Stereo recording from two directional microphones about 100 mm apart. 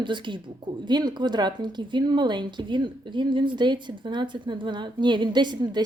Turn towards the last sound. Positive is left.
turn(degrees=-50)  # may be behind; listen again after turning